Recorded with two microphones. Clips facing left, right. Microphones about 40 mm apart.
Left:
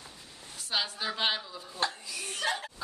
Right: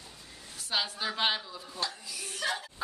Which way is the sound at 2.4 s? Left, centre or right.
Left.